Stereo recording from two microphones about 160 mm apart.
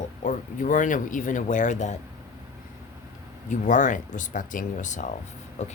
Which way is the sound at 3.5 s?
50° left (ahead or behind).